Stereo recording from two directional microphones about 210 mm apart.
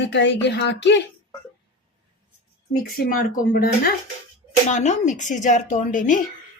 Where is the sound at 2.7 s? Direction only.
45° left (ahead or behind).